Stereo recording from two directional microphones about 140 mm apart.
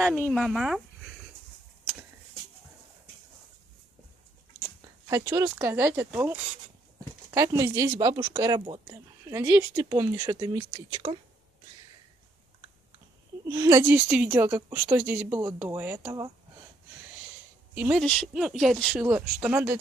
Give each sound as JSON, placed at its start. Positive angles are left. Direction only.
{"t": 0.3, "sound": "speech", "side_deg": -5}
{"t": 5.0, "sound": "speech", "side_deg": -25}
{"t": 9.3, "sound": "speech", "side_deg": -20}
{"t": 10.7, "sound": "speech", "side_deg": -35}
{"t": 13.5, "sound": "speech", "side_deg": -25}
{"t": 13.8, "sound": "speech", "side_deg": -10}
{"t": 17.7, "sound": "speech", "side_deg": -10}
{"t": 18.0, "sound": "speech", "side_deg": 5}
{"t": 19.0, "sound": "speech", "side_deg": -10}